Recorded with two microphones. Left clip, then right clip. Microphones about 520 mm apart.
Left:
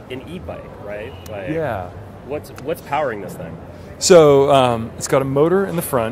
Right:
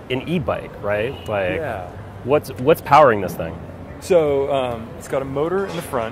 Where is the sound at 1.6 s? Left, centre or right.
Left.